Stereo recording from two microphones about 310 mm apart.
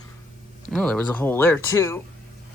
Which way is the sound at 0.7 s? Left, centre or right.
Centre.